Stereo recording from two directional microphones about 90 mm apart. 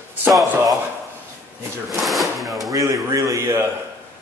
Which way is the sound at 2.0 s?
Centre (ahead or behind).